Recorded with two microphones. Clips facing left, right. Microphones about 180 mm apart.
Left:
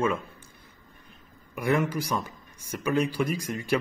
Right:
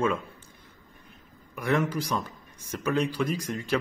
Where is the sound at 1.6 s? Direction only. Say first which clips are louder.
Left 1 dB; 10° left (ahead or behind).